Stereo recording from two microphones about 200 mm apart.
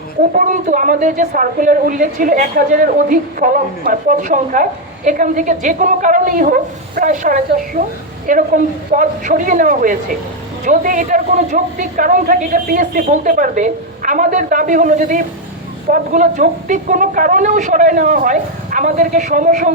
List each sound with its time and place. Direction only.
0.3 s speech: 40° right (ahead or behind)